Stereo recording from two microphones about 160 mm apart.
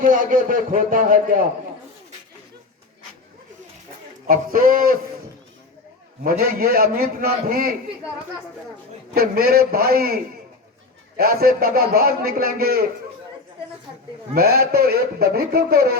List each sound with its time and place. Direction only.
0.0 s a man's voice: 55° right (ahead or behind)
4.3 s a man's voice: 60° right (ahead or behind)
6.2 s a man's voice: 70° right (ahead or behind)
9.1 s a man's voice: 70° right (ahead or behind)
11.2 s a man's voice: 70° right (ahead or behind)
14.3 s a man's voice: 75° right (ahead or behind)